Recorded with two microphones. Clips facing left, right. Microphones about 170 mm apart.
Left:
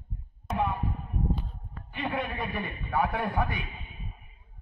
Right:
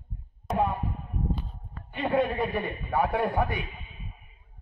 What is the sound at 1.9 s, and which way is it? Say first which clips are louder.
A man's voice: right 7 dB; 30° right (ahead or behind).